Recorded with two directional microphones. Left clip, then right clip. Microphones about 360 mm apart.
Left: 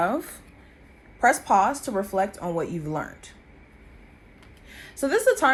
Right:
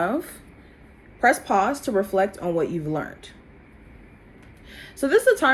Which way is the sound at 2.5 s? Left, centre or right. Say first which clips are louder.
Right 4 dB; left.